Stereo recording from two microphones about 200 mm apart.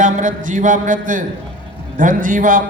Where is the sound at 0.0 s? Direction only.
40° right (ahead or behind).